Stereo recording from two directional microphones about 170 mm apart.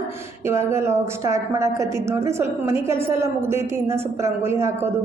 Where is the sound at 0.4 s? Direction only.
15° right (ahead or behind).